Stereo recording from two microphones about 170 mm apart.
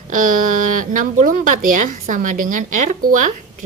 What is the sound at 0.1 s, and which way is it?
A woman's voice, 50° right (ahead or behind).